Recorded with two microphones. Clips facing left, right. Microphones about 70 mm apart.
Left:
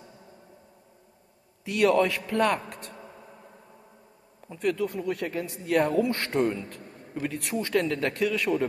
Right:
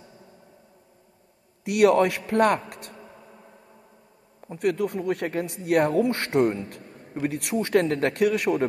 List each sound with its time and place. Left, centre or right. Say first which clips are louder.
1.6 s a man's voice: right 4 dB; right
3.0 s a sound: even; centre
4.6 s speech: right 3 dB; right
7.5 s speech: right 4 dB; right